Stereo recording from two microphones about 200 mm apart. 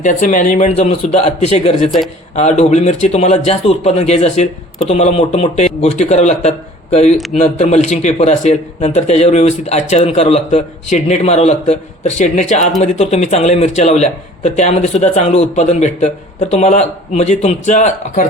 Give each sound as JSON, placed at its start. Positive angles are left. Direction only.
{"t": 0.0, "sound": "a man's voice", "side_deg": 40}